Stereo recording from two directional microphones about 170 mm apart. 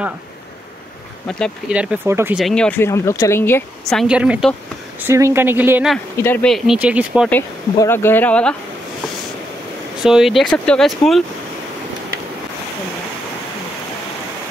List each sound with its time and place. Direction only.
1.2 s speech: centre (ahead or behind)
2.3 s speech: 5° left (ahead or behind)
2.9 s speech: 15° left (ahead or behind)
3.9 s speech: 5° right (ahead or behind)
6.1 s speech: 15° left (ahead or behind)
6.4 s speech: centre (ahead or behind)
7.2 s speech: 10° left (ahead or behind)
10.0 s speech: centre (ahead or behind)